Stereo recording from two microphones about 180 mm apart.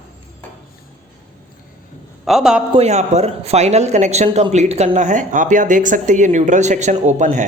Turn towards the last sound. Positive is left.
turn(degrees=-40)  # may be behind; listen again after turning